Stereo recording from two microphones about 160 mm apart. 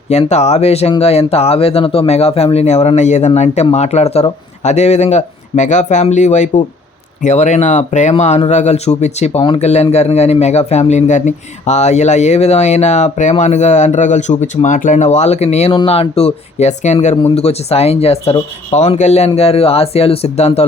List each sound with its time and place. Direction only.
0.1 s speech: 45° left (ahead or behind)